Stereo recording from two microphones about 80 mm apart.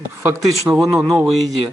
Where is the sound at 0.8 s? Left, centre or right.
Centre.